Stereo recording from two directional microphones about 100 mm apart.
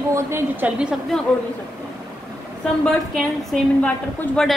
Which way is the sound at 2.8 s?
Centre (ahead or behind).